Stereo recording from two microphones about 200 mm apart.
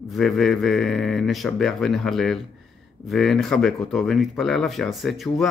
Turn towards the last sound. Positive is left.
turn(degrees=0)  # may be behind; listen again after turning